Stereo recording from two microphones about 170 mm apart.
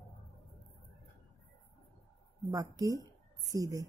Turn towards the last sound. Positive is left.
turn(degrees=-20)  # may be behind; listen again after turning